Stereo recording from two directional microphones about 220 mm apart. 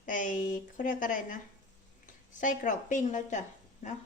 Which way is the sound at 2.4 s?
35° left (ahead or behind).